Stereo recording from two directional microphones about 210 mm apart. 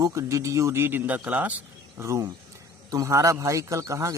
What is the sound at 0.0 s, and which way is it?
A man's voice, 15° right (ahead or behind).